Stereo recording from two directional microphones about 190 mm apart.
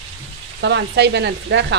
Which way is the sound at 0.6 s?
65° right (ahead or behind).